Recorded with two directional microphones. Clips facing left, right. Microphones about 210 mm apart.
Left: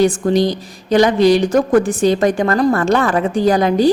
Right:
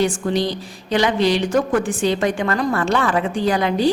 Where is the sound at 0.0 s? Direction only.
40° left (ahead or behind).